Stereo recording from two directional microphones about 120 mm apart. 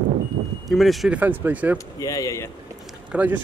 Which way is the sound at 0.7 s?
Centre (ahead or behind).